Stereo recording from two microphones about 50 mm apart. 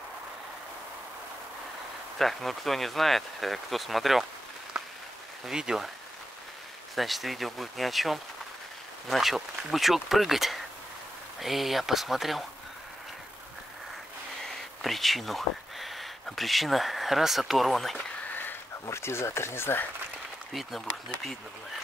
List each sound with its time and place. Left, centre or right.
2.1 s speech: centre
4.7 s applause: centre
5.5 s speech: centre
7.0 s speech: centre
14.8 s speech: centre
18.3 s a sound: left
18.9 s speech: left
20.5 s speech: centre